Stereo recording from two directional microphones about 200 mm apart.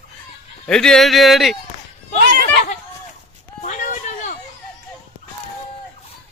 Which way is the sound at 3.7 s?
40° left (ahead or behind).